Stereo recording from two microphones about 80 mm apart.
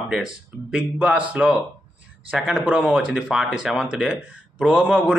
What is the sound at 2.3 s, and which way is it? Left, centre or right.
Speech, centre.